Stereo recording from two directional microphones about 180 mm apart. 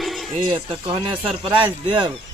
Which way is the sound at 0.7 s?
25° right (ahead or behind).